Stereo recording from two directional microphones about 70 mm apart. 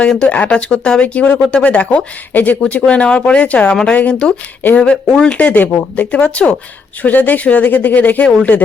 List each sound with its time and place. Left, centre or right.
0.1 s speech: centre